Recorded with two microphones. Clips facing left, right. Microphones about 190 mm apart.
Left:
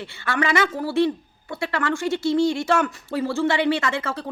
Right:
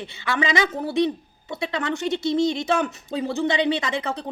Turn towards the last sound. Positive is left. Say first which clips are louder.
# left 1 dB
turn(degrees=-20)  # may be behind; listen again after turning